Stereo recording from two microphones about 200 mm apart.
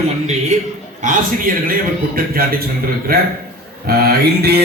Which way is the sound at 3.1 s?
50° right (ahead or behind).